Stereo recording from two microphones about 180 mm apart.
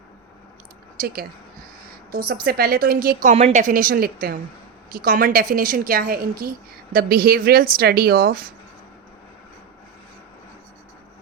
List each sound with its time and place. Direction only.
0.9 s a woman's voice: 55° right (ahead or behind)
3.3 s a woman's voice: 40° right (ahead or behind); by 8.4 s 55° right (ahead or behind)